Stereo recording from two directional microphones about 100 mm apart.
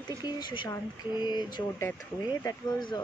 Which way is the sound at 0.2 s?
50° left (ahead or behind).